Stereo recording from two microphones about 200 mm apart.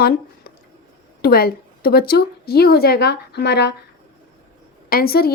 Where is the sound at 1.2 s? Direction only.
50° left (ahead or behind).